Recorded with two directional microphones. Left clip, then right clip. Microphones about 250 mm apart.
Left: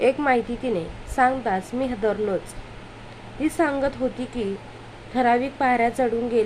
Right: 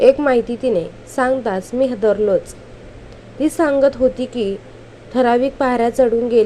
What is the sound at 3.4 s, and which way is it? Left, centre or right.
Speech, centre.